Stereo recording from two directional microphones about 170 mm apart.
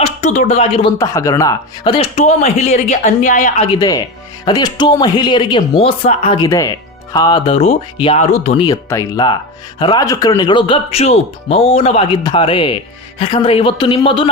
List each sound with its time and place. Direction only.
0.0 s speech: 45° left (ahead or behind)
0.9 s speech: 20° left (ahead or behind)
2.1 s speech: 40° left (ahead or behind)
3.7 s speech: 25° left (ahead or behind)
6.4 s speech: 20° left (ahead or behind)
8.7 s speech: 20° left (ahead or behind)